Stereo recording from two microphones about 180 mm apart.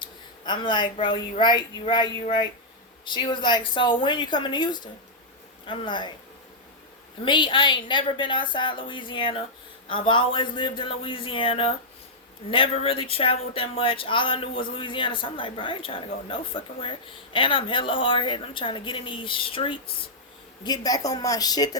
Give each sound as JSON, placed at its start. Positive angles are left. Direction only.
{"t": 0.0, "sound": "speech", "side_deg": 25}
{"t": 7.3, "sound": "speech", "side_deg": 25}